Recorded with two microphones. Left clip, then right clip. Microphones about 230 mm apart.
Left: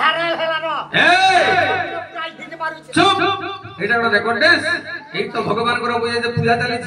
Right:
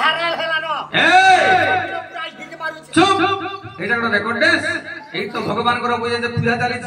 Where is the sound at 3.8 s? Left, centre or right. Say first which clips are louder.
Left 2 dB; centre.